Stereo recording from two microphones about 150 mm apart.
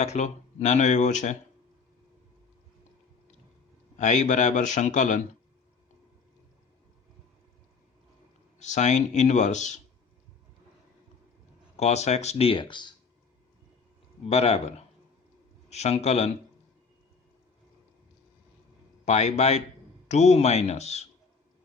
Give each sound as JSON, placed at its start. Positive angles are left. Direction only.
{"t": 0.0, "sound": "speech", "side_deg": 50}
{"t": 3.9, "sound": "a man's voice", "side_deg": 55}
{"t": 8.5, "sound": "speech", "side_deg": 50}
{"t": 11.8, "sound": "speech", "side_deg": 45}
{"t": 14.3, "sound": "speech", "side_deg": 45}
{"t": 19.0, "sound": "speech", "side_deg": 50}